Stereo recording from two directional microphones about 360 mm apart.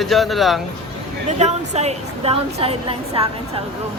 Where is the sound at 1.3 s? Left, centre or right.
Centre.